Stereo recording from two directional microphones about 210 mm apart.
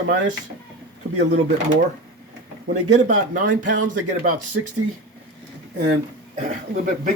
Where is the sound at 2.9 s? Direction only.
35° right (ahead or behind).